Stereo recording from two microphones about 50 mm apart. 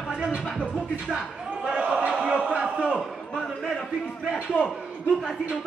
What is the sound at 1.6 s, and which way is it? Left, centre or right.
Basketball bounce, centre.